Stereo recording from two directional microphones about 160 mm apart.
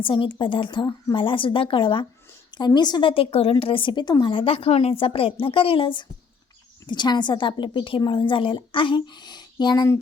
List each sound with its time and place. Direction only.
0.0 s a woman's voice: 30° left (ahead or behind)